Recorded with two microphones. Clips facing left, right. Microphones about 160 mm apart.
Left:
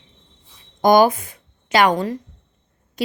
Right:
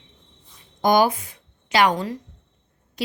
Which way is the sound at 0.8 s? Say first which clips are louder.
Left 4 dB; 45° left (ahead or behind).